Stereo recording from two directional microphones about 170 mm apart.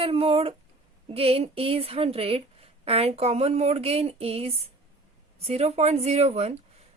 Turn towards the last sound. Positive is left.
turn(degrees=-40)  # may be behind; listen again after turning